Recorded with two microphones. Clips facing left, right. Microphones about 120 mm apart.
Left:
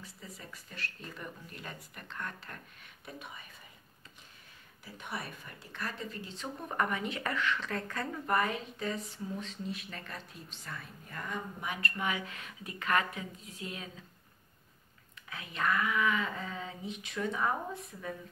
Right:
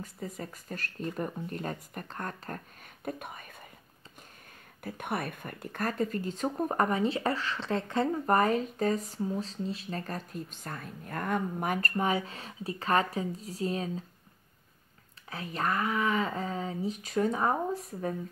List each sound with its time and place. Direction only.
0.0 s speech: 45° right (ahead or behind)
4.8 s speech: 55° right (ahead or behind); by 14.0 s 35° right (ahead or behind)
15.2 s speech: 35° right (ahead or behind)